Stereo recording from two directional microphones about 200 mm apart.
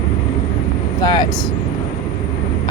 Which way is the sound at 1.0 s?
20° left (ahead or behind).